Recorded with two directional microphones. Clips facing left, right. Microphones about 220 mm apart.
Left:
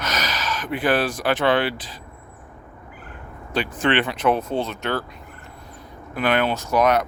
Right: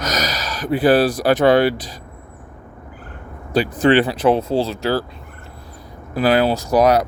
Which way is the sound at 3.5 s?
35° right (ahead or behind).